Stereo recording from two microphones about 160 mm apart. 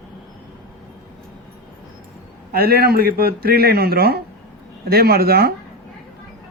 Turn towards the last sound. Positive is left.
turn(degrees=-75)  # may be behind; listen again after turning